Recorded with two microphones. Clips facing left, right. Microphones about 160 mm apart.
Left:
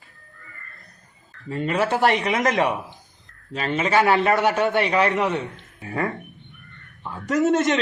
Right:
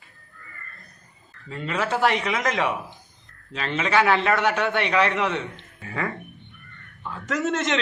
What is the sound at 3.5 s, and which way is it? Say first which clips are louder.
A man's voice: left 3 dB; 40° left (ahead or behind).